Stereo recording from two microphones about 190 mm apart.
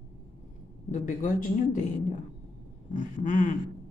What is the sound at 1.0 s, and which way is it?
Speech, 45° left (ahead or behind).